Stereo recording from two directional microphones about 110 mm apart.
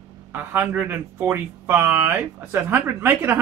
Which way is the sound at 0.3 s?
20° right (ahead or behind).